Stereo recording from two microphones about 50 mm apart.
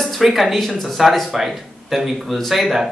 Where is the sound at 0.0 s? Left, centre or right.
Centre.